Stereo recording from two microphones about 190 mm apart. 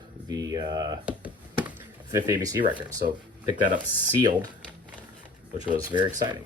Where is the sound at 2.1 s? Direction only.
20° right (ahead or behind).